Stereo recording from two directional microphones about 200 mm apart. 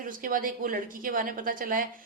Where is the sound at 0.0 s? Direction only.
45° right (ahead or behind).